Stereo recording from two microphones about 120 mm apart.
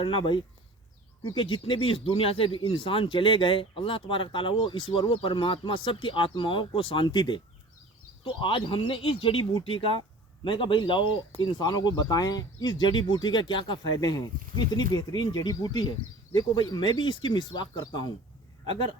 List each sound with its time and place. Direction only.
0.0 s speech: 45° left (ahead or behind)